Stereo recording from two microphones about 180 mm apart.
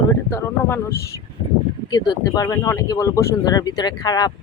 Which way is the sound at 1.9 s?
25° left (ahead or behind).